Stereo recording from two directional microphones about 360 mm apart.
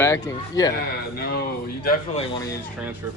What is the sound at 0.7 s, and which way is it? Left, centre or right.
Speech, left.